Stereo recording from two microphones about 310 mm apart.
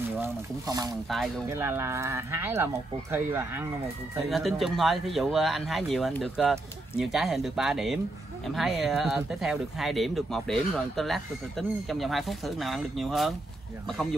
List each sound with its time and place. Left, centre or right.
0.2 s speech: centre